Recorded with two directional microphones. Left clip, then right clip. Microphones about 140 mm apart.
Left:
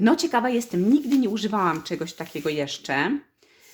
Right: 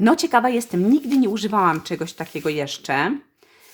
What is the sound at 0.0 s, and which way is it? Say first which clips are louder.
Speech: right 4 dB; 40° right (ahead or behind).